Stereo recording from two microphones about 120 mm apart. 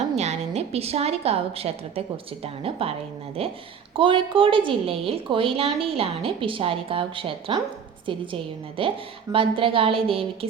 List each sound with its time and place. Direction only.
0.2 s a woman's voice: 65° right (ahead or behind)